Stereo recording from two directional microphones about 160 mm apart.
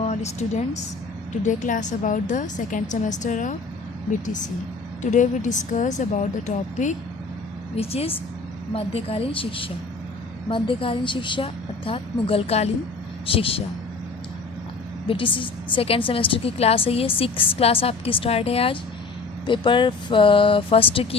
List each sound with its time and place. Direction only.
0.0 s a woman's voice: 45° left (ahead or behind)
5.1 s speech: 50° left (ahead or behind)
7.8 s a woman's voice: 40° left (ahead or behind)
15.0 s a woman's voice: 35° left (ahead or behind)